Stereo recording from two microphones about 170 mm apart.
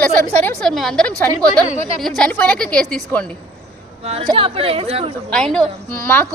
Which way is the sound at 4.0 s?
35° right (ahead or behind).